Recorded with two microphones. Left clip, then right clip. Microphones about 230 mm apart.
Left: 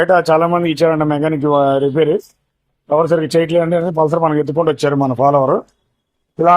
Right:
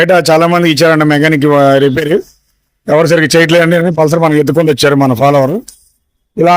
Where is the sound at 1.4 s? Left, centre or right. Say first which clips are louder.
Right 4 dB; right.